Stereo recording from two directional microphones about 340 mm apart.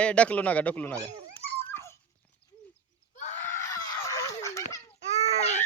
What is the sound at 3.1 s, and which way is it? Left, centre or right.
Screaming, centre.